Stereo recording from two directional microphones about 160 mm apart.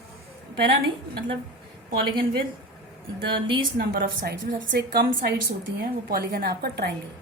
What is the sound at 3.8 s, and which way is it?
A woman's voice, 70° right (ahead or behind).